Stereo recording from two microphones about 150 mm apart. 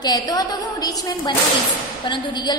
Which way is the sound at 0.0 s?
25° left (ahead or behind).